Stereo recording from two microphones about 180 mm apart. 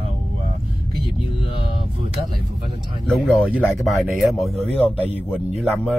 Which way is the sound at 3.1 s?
5° left (ahead or behind).